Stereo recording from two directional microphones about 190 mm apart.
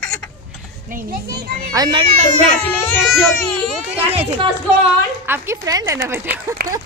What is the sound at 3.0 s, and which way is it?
Speech, centre (ahead or behind).